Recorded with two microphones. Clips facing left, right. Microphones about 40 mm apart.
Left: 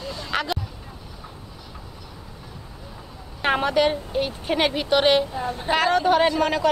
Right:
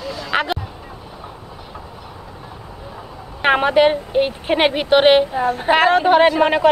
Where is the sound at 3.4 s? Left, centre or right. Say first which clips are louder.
Right 6 dB; right.